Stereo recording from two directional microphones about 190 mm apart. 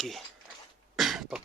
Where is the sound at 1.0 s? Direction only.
Centre (ahead or behind).